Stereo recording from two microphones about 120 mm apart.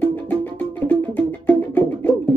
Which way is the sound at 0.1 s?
15° left (ahead or behind).